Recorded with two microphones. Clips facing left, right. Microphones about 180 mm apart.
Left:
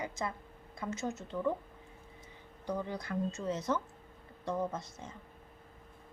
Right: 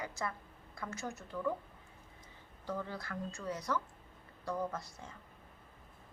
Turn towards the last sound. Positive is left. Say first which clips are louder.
# left 2 dB
turn(degrees=20)  # may be behind; listen again after turning